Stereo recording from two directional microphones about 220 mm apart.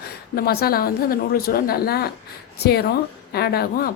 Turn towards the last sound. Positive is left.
turn(degrees=45)  # may be behind; listen again after turning